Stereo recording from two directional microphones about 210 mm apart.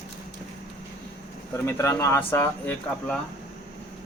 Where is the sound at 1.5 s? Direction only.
10° left (ahead or behind).